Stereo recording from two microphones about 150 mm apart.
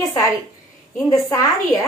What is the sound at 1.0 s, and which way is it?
Speech, 25° left (ahead or behind).